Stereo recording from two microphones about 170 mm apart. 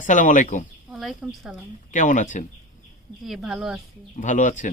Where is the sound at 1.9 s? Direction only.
50° left (ahead or behind).